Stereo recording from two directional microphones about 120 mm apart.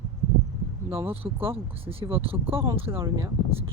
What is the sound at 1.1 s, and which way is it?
Speech, 50° right (ahead or behind).